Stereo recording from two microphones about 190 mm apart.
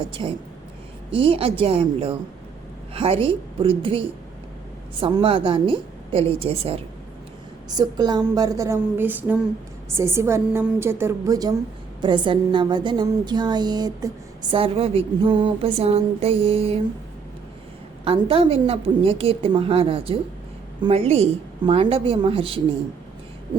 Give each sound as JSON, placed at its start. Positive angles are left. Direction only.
{"t": 0.1, "sound": "a woman's voice", "side_deg": -25}
{"t": 7.7, "sound": "a woman's voice", "side_deg": -20}
{"t": 18.0, "sound": "speech", "side_deg": -30}